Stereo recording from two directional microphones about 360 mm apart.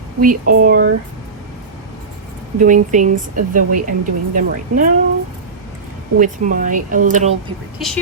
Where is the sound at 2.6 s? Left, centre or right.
Right.